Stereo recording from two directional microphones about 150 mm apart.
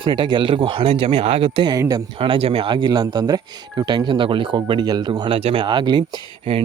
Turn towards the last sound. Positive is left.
turn(degrees=-35)  # may be behind; listen again after turning